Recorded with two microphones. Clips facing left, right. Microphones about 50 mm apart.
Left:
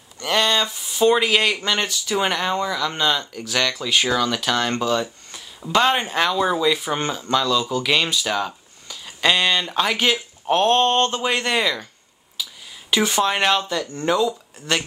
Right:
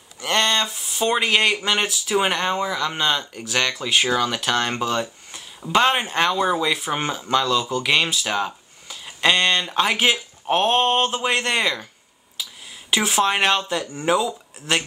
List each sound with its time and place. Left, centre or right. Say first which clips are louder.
0.2 s speech: left 1 dB; centre
12.4 s a sound: left 2 dB; centre
12.9 s speech: even; centre